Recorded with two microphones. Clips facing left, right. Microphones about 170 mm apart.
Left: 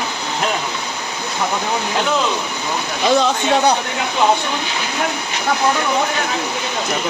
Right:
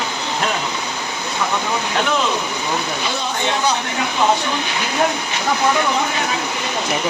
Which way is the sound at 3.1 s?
90° left.